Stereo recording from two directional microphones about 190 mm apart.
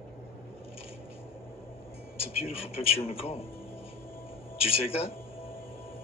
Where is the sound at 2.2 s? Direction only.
30° left (ahead or behind).